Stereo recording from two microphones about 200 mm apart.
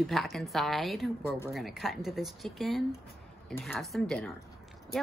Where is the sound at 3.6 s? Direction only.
10° left (ahead or behind).